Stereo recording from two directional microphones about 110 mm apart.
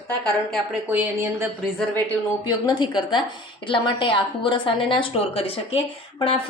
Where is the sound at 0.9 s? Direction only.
15° right (ahead or behind).